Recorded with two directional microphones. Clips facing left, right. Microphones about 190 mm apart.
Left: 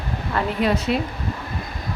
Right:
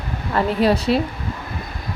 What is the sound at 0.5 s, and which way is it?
Speech, 35° right (ahead or behind).